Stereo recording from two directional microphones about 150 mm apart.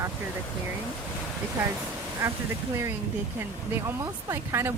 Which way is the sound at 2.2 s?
15° right (ahead or behind).